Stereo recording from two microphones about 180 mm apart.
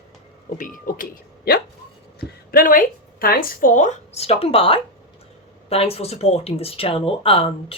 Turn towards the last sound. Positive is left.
turn(degrees=30)  # may be behind; listen again after turning